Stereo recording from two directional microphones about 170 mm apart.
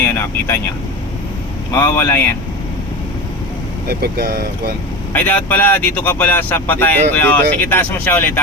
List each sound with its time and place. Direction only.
0.0 s speech: 10° left (ahead or behind)
1.7 s speech: 15° left (ahead or behind)
3.8 s speech: 65° right (ahead or behind)
5.1 s speech: 10° left (ahead or behind)